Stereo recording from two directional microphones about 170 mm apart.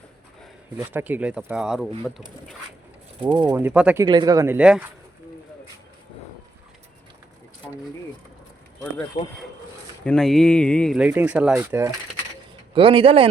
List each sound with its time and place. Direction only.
0.9 s speech: 10° right (ahead or behind)
3.2 s speech: 25° right (ahead or behind)
3.6 s speech: 5° right (ahead or behind)
4.0 s speech: 25° right (ahead or behind)
4.5 s speech: 5° right (ahead or behind)
9.2 s speech: 45° left (ahead or behind)
10.0 s speech: 5° left (ahead or behind)
10.9 s speech: 10° right (ahead or behind)
12.7 s a man's voice: 30° right (ahead or behind)